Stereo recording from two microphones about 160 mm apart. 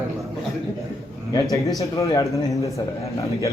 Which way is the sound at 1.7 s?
20° left (ahead or behind).